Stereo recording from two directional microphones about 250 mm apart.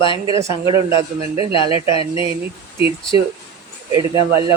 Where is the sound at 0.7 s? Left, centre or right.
Left.